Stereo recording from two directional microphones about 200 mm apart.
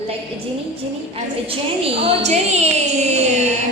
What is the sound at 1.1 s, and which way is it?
A woman's voice, 30° right (ahead or behind).